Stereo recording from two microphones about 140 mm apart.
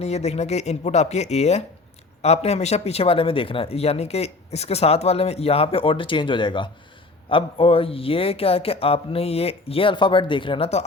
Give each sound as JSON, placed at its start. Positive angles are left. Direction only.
{"t": 0.0, "sound": "speech", "side_deg": 50}